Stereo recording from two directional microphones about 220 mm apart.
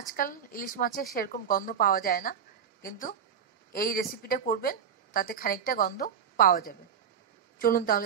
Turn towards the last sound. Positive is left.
turn(degrees=40)  # may be behind; listen again after turning